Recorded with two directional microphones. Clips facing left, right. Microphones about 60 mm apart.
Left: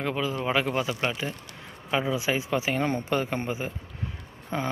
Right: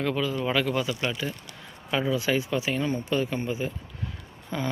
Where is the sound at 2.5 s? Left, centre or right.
Left.